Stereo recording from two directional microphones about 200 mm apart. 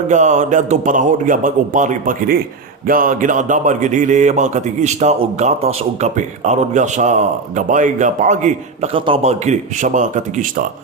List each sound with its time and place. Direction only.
0.1 s speech: 35° right (ahead or behind)